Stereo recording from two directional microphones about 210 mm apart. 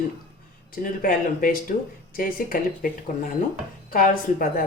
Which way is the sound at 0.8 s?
40° left (ahead or behind).